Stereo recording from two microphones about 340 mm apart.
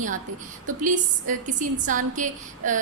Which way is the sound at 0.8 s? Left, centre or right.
Right.